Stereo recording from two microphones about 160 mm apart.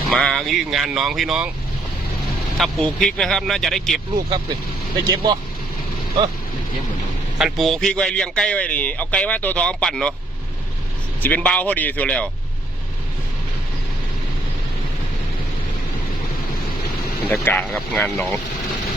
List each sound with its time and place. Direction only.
0.1 s speech: centre (ahead or behind)
2.6 s speech: centre (ahead or behind)
5.0 s speech: 25° right (ahead or behind)
7.3 s a man's voice: centre (ahead or behind)
11.2 s a man's voice: 10° left (ahead or behind)
17.4 s a man's voice: 5° left (ahead or behind)